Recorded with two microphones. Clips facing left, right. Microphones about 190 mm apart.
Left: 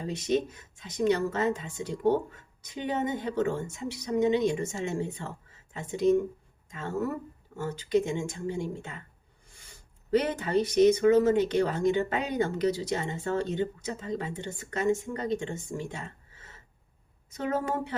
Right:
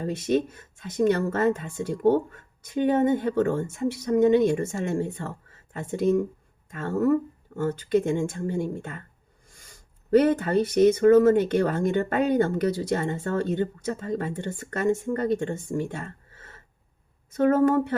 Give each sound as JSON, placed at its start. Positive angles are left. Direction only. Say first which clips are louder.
{"t": 0.0, "sound": "speech", "louder": "right 4 dB", "side_deg": -55}
{"t": 10.1, "sound": "speech", "louder": "right 6 dB", "side_deg": -50}